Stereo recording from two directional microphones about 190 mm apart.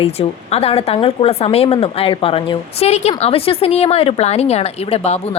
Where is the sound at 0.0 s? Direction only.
30° left (ahead or behind).